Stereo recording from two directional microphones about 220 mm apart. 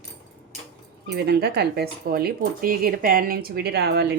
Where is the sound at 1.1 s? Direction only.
45° right (ahead or behind).